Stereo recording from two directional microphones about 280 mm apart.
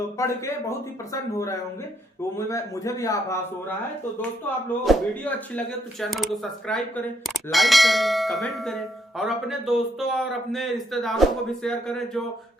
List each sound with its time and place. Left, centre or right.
0.2 s a man's voice: centre
4.2 s bell: centre